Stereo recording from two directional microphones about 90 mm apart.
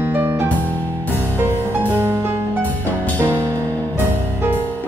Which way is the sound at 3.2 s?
25° right (ahead or behind).